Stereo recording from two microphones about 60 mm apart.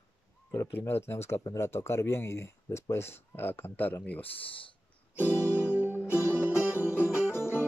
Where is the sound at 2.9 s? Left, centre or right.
Left.